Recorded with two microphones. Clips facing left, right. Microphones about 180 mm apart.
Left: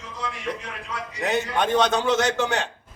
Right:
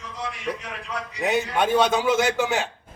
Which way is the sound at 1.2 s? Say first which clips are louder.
Right 1 dB; 5° right (ahead or behind).